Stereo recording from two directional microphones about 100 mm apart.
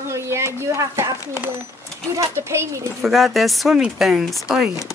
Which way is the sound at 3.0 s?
Centre (ahead or behind).